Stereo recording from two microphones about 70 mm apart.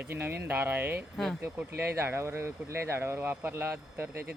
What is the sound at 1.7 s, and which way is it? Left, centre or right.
Speech, right.